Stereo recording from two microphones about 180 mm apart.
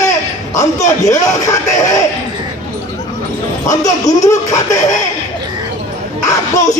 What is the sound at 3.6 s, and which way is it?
Speech, 20° left (ahead or behind).